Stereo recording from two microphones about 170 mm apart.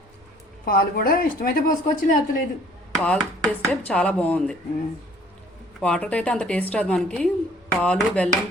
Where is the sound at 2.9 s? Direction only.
5° left (ahead or behind).